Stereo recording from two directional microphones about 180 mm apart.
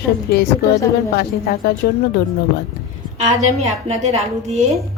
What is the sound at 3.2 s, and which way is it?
A woman's voice, 35° right (ahead or behind).